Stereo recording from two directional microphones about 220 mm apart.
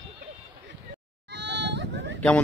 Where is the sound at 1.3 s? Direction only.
50° right (ahead or behind).